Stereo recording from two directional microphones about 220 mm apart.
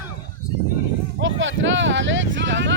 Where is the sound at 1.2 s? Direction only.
60° right (ahead or behind).